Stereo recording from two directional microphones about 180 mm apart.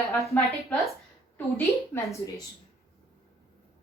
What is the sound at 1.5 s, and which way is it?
Speech, 15° left (ahead or behind).